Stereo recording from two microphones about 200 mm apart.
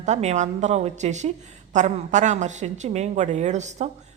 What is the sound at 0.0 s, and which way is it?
A woman's voice, 35° right (ahead or behind).